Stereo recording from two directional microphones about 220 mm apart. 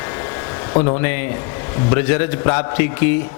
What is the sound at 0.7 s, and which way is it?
Speech, 25° left (ahead or behind).